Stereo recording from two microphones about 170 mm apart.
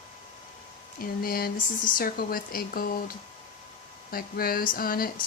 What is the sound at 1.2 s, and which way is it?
Speech, 60° left (ahead or behind).